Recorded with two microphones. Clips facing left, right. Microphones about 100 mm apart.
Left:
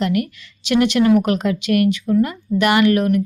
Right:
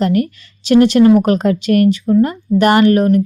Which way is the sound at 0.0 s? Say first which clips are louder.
Right 5 dB; 40° right (ahead or behind).